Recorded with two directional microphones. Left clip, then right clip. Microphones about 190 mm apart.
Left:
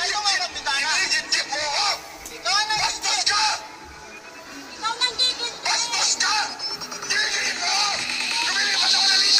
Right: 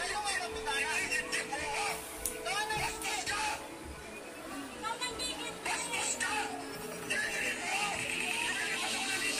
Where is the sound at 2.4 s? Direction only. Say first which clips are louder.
Left 13 dB; 30° left (ahead or behind).